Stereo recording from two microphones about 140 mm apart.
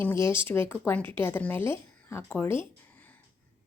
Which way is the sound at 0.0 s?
15° left (ahead or behind).